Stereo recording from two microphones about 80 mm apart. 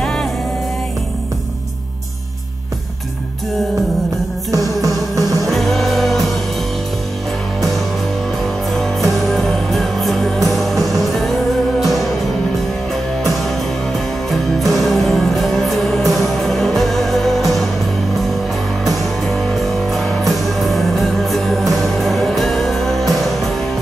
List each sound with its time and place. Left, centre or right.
0.0 s music: centre
4.5 s music: right
5.5 s music: centre
9.3 s music: centre
13.9 s music: centre
18.9 s music: centre